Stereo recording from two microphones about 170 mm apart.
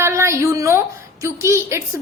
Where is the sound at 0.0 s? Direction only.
15° right (ahead or behind).